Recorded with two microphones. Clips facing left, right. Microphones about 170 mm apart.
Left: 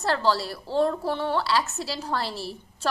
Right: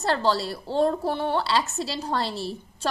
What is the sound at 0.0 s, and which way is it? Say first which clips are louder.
A woman's voice: right 1 dB; 20° right (ahead or behind).